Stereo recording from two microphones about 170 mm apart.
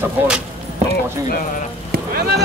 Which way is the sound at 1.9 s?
65° right (ahead or behind).